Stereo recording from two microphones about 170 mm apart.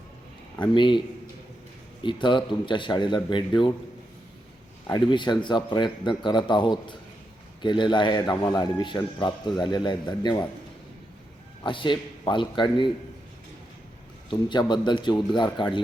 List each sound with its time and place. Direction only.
0.6 s speech: 30° left (ahead or behind)
2.0 s speech: 30° left (ahead or behind)
4.9 s speech: 25° left (ahead or behind)
11.6 s speech: 30° left (ahead or behind)
14.3 s speech: 25° left (ahead or behind)